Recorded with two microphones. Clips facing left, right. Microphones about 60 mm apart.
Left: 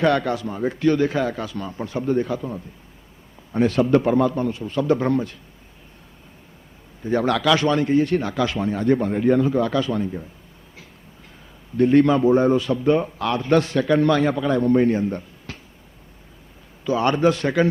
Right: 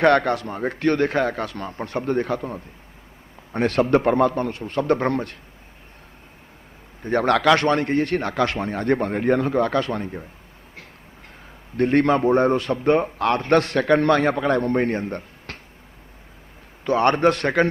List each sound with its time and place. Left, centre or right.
0.0 s a man's voice: right
7.0 s a man's voice: right
11.8 s a man's voice: right
16.8 s a man's voice: right